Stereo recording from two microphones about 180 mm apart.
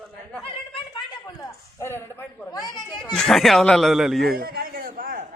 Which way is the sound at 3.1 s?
5° left (ahead or behind).